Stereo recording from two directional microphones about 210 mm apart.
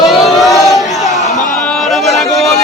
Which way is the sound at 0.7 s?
Centre (ahead or behind).